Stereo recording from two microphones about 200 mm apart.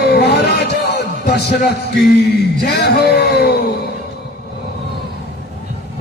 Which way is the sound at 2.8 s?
55° left (ahead or behind).